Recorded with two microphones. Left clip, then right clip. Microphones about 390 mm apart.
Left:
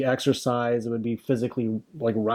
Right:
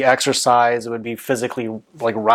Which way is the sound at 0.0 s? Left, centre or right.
Right.